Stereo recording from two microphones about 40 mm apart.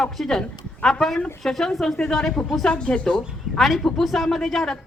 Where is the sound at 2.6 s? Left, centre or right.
Left.